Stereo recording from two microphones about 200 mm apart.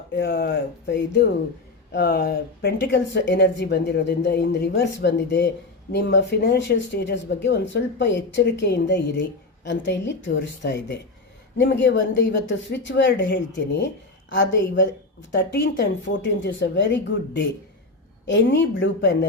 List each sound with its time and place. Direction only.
0.2 s speech: 50° left (ahead or behind)